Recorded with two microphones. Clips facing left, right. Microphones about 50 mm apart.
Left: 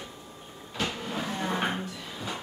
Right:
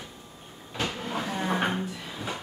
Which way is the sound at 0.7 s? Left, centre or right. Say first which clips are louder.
Right 1 dB; centre.